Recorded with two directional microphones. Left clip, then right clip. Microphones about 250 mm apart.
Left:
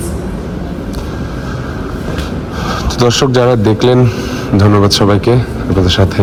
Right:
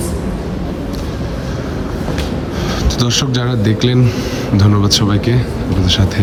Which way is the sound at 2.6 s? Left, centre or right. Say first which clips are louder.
Left 8 dB; centre.